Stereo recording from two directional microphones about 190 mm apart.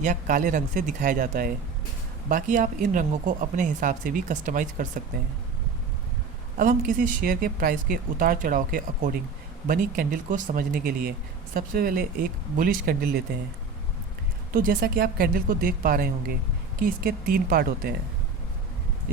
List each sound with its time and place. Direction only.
0.0 s speech: 45° right (ahead or behind)
6.6 s speech: 45° right (ahead or behind)
14.5 s speech: 50° right (ahead or behind)